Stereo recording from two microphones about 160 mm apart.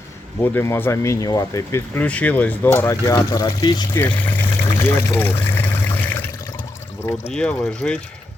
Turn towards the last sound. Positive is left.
turn(degrees=5)  # may be behind; listen again after turning